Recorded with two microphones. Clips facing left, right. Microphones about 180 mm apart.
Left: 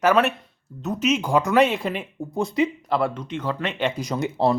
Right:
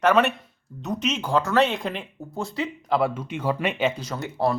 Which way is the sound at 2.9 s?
5° right (ahead or behind).